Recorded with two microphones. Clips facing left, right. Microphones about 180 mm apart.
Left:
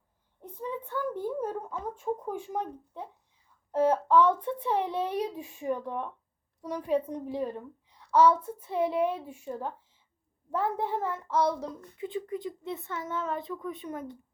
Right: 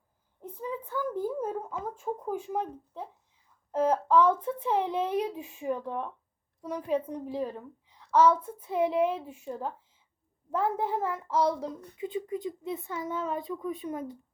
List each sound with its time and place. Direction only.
0.4 s a child's voice: 5° right (ahead or behind)
11.6 s a child's voice: 20° right (ahead or behind)